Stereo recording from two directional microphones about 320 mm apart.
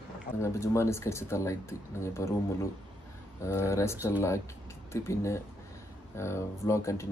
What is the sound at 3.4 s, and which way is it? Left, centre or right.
Speech, centre.